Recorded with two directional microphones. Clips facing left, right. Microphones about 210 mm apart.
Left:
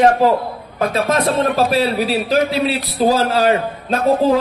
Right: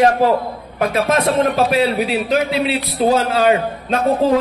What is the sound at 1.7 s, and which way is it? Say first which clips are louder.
A man's voice: even; 30° left (ahead or behind).